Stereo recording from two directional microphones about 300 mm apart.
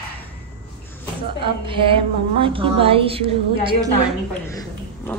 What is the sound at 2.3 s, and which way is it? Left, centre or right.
A woman's voice, centre.